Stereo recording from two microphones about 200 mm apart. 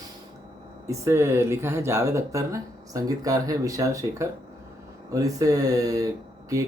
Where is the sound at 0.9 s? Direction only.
15° right (ahead or behind).